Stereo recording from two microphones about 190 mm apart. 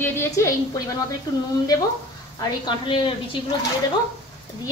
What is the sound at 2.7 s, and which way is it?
Speech, 25° left (ahead or behind).